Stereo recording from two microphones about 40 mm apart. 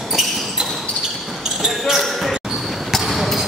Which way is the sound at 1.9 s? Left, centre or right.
Centre.